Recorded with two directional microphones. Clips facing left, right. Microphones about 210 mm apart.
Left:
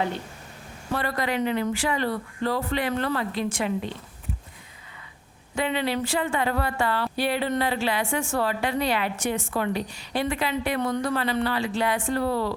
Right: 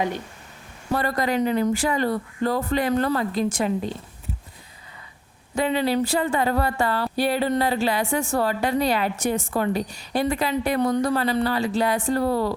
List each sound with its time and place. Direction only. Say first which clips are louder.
0.9 s a woman's voice: right 4 dB; 40° right (ahead or behind)
5.5 s a woman's voice: right 4 dB; 40° right (ahead or behind)